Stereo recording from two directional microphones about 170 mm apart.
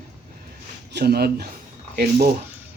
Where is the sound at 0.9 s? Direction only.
70° right (ahead or behind).